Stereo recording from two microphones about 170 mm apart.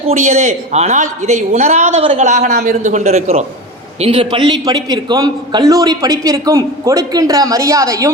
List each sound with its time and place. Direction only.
0.1 s a woman's voice: 45° right (ahead or behind); by 8.1 s 20° right (ahead or behind)